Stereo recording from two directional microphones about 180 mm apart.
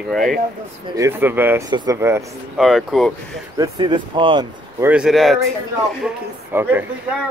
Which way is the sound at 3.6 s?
25° right (ahead or behind).